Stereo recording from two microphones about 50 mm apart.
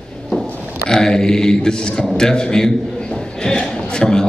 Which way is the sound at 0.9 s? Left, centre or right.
Centre.